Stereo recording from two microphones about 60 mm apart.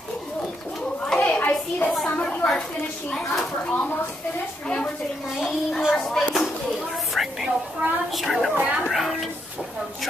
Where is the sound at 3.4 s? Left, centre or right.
Centre.